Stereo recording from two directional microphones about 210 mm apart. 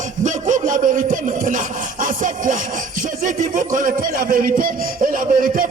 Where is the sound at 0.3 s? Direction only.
40° right (ahead or behind).